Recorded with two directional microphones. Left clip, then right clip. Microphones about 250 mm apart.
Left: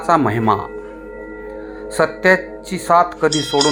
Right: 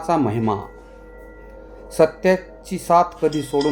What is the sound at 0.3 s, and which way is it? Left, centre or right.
Speech, centre.